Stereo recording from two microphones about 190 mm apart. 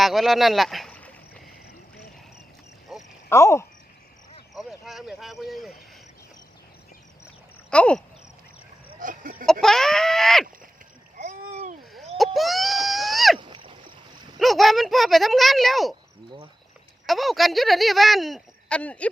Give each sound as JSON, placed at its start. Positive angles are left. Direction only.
{"t": 0.0, "sound": "rowboat", "side_deg": 0}
{"t": 2.9, "sound": "cricket", "side_deg": 0}
{"t": 3.2, "sound": "speech", "side_deg": 15}
{"t": 4.5, "sound": "speech", "side_deg": 0}
{"t": 7.7, "sound": "speech", "side_deg": 5}
{"t": 9.0, "sound": "chicken", "side_deg": -45}
{"t": 9.5, "sound": "speech", "side_deg": 0}
{"t": 11.2, "sound": "a sound", "side_deg": -40}
{"t": 11.9, "sound": "screaming", "side_deg": 0}
{"t": 13.4, "sound": "boat", "side_deg": -25}
{"t": 14.3, "sound": "speech", "side_deg": 0}
{"t": 17.1, "sound": "speech", "side_deg": 0}